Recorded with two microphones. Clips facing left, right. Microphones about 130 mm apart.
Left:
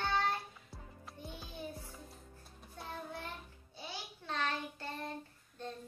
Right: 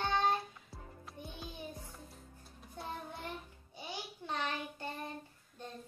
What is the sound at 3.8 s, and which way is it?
Child singing, 15° right (ahead or behind).